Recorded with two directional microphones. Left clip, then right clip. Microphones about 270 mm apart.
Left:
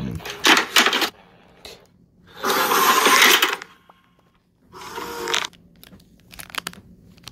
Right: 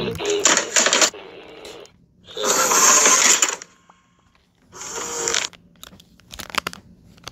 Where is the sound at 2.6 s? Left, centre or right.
Centre.